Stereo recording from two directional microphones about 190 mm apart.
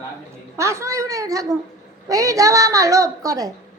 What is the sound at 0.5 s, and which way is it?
A woman's voice, 15° right (ahead or behind).